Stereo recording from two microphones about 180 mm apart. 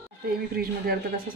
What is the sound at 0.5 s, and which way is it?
Speech, 55° right (ahead or behind).